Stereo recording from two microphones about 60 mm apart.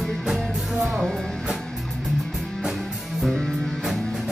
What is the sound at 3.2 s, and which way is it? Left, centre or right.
Music, centre.